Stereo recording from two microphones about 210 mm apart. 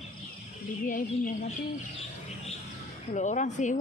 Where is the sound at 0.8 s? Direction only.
40° left (ahead or behind).